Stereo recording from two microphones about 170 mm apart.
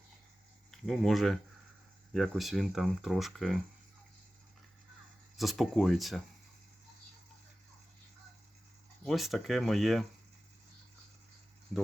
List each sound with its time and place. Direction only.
0.7 s speech: centre (ahead or behind)
5.4 s speech: centre (ahead or behind)
9.0 s speech: centre (ahead or behind)